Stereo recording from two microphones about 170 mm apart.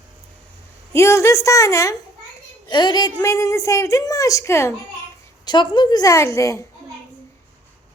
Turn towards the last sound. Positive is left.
turn(degrees=15)  # may be behind; listen again after turning